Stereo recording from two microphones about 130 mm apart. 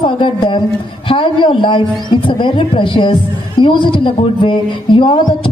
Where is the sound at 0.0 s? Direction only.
40° left (ahead or behind).